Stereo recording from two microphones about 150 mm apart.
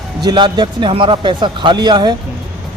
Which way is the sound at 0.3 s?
30° right (ahead or behind).